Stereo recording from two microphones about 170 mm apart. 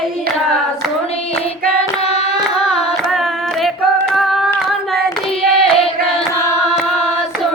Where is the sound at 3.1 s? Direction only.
Centre (ahead or behind).